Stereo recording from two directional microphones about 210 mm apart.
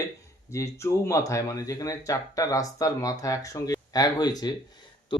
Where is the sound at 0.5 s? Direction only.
15° left (ahead or behind).